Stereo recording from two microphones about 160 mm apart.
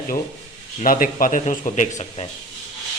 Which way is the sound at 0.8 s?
60° left (ahead or behind).